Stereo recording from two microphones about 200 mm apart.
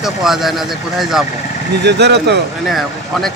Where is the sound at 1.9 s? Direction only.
60° right (ahead or behind).